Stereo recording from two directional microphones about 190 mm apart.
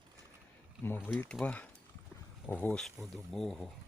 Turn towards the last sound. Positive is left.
turn(degrees=0)  # may be behind; listen again after turning